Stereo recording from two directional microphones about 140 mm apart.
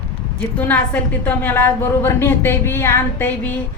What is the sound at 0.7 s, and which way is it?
A woman's voice, 10° left (ahead or behind).